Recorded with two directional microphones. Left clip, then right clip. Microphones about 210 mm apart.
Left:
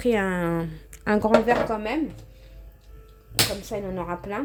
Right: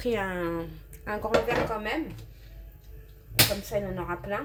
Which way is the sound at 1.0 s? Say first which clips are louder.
Left 9 dB; 50° left (ahead or behind).